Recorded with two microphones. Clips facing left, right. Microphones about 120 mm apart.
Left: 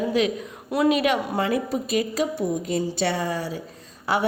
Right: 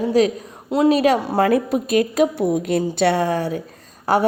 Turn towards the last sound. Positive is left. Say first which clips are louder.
# right 6 dB
turn(degrees=-45)  # may be behind; listen again after turning